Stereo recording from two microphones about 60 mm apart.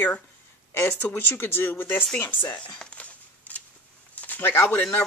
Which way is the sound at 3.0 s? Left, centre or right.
Left.